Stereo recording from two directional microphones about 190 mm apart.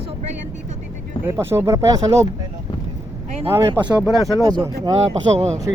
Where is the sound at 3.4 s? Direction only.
15° right (ahead or behind).